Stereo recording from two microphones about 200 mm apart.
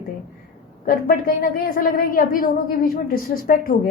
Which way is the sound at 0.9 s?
45° left (ahead or behind).